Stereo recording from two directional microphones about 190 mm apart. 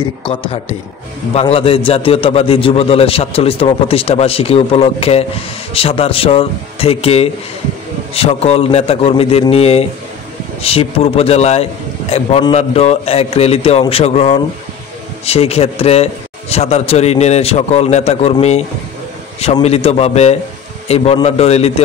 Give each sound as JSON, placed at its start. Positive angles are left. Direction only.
{"t": 0.2, "sound": "a man's voice", "side_deg": 25}